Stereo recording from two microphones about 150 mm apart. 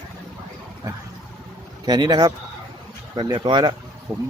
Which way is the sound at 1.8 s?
25° right (ahead or behind).